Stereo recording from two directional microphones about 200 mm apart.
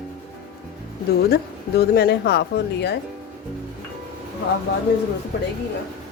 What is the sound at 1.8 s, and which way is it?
Speech, 55° left (ahead or behind).